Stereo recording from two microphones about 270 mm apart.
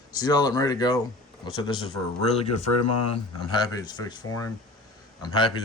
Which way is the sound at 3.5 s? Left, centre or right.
Centre.